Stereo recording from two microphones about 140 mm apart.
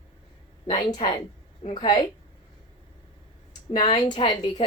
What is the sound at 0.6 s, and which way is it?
A woman's voice, 30° left (ahead or behind).